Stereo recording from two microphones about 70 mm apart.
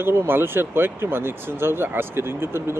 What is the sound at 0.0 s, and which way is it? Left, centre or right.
Speech, right.